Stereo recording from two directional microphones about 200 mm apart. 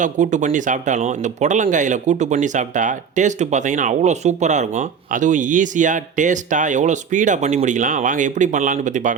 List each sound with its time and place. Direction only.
0.0 s speech: 35° right (ahead or behind)